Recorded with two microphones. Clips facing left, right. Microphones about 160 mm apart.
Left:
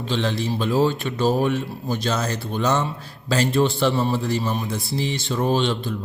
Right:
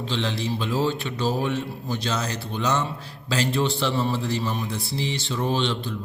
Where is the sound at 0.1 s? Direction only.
45° left (ahead or behind).